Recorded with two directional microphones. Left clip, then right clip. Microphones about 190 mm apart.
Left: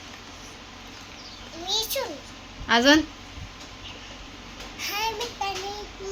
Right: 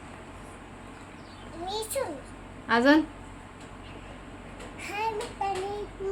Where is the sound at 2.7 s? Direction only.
15° left (ahead or behind).